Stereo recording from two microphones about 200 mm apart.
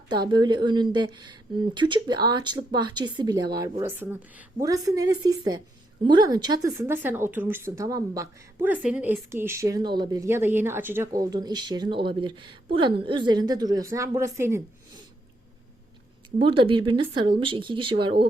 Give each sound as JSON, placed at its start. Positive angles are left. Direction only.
{"t": 0.3, "sound": "a woman's voice", "side_deg": -20}
{"t": 16.4, "sound": "speech", "side_deg": -25}